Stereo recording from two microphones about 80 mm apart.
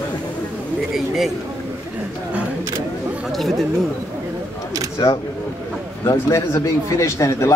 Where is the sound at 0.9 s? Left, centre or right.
Centre.